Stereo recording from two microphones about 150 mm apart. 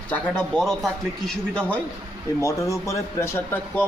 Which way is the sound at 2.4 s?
20° left (ahead or behind).